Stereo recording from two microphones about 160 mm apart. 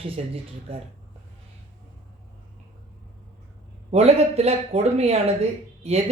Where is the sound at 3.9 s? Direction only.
40° right (ahead or behind).